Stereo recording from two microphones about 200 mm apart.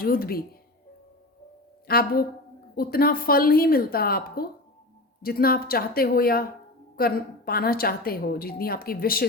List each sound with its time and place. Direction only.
0.0 s a woman's voice: 50° left (ahead or behind)
1.9 s a woman's voice: 50° left (ahead or behind)